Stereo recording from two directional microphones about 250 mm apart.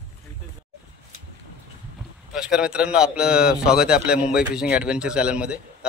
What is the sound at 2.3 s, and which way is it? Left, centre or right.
Speech, centre.